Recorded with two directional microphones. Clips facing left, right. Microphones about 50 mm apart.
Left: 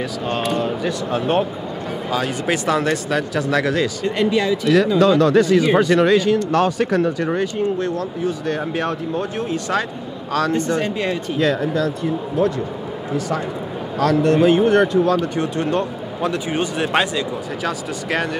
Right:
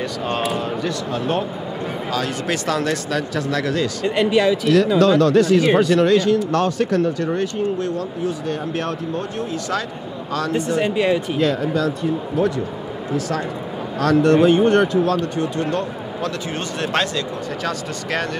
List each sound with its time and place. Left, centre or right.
0.0 s speech: centre
0.8 s speech: centre
4.1 s speech: centre
4.9 s speech: centre
9.5 s speech: left
10.5 s speech: centre
13.9 s speech: centre
15.7 s speech: centre